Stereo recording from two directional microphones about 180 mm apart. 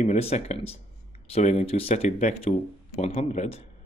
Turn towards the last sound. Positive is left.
turn(degrees=40)  # may be behind; listen again after turning